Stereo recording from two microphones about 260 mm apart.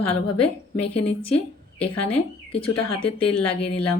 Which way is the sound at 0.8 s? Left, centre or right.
Left.